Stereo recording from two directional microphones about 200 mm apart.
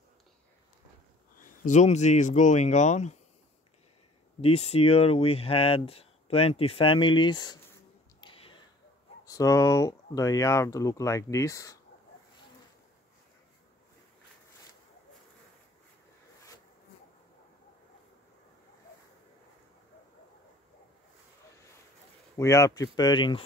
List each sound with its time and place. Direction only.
1.4 s speech: 40° left (ahead or behind)
4.4 s speech: 30° left (ahead or behind)
8.2 s a sound: 25° left (ahead or behind)
9.2 s speech: 15° left (ahead or behind)
22.4 s speech: 15° left (ahead or behind)